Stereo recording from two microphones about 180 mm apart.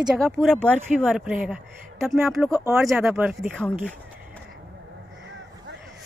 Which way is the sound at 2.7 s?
5° right (ahead or behind).